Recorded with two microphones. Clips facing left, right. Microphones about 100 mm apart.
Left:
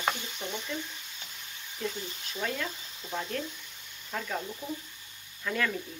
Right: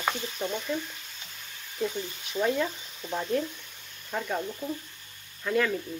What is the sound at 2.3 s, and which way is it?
Speech, 15° right (ahead or behind).